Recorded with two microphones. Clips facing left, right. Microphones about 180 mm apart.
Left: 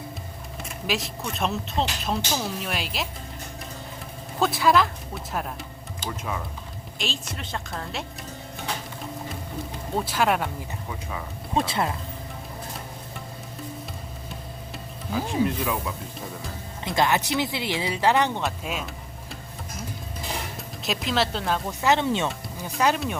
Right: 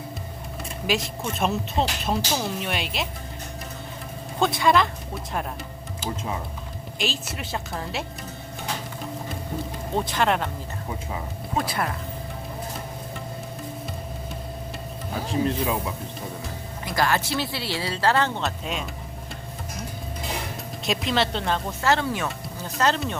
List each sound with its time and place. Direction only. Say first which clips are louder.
0.9 s speech: right 3 dB; centre (ahead or behind)
4.4 s speech: even; centre (ahead or behind)
6.1 s speech: right 1 dB; 25° right (ahead or behind)
7.0 s speech: right 3 dB; 5° right (ahead or behind)
9.9 s speech: even; 5° left (ahead or behind)
11.5 s speech: left 2 dB; 25° left (ahead or behind)
15.4 s speech: right 2 dB; 30° right (ahead or behind)
16.8 s speech: left 1 dB; 20° left (ahead or behind); by 18.9 s 5° left (ahead or behind)
20.8 s speech: right 1 dB; centre (ahead or behind)
21.8 s speech: left 3 dB; 20° left (ahead or behind)
22.6 s speech: even; 10° left (ahead or behind)